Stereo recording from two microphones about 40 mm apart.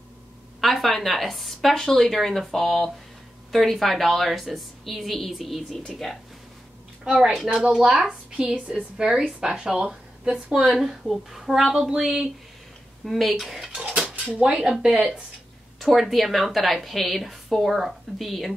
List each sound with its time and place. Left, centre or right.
0.6 s a woman's voice: centre
5.9 s speech: centre
7.4 s a woman's voice: right
9.0 s a woman's voice: centre
13.0 s a woman's voice: centre
13.8 s speech: right
15.8 s a woman's voice: centre